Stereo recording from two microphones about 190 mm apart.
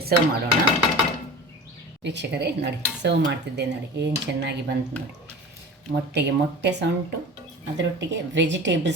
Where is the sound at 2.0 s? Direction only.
65° right (ahead or behind).